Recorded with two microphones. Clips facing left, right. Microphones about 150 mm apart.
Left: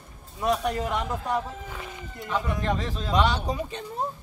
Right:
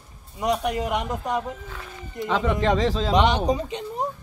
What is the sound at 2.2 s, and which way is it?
Speech, 90° right.